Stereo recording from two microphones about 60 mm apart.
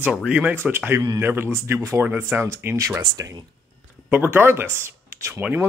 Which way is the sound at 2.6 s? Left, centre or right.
Right.